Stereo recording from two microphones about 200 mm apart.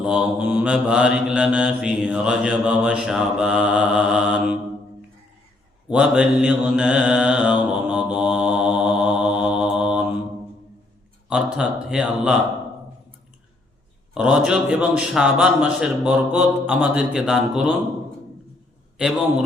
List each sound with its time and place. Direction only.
0.0 s mantra: 5° right (ahead or behind)
5.9 s mantra: 5° right (ahead or behind)
11.3 s mantra: 5° right (ahead or behind)
14.1 s mantra: 5° right (ahead or behind)